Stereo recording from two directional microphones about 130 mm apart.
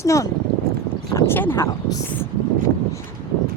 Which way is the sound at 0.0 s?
25° left (ahead or behind).